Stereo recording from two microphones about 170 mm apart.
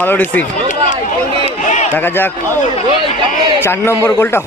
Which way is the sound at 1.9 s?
10° left (ahead or behind).